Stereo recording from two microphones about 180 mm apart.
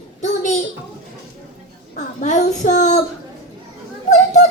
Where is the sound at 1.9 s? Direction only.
40° left (ahead or behind).